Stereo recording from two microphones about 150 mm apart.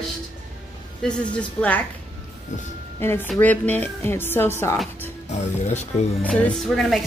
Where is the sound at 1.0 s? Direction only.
5° left (ahead or behind).